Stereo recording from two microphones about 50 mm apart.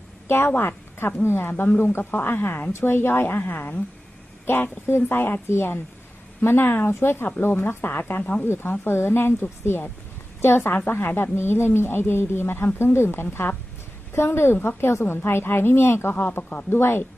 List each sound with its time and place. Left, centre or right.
0.3 s speech: left
8.2 s speech: left
8.4 s speech: left
16.1 s speech: left
16.7 s speech: left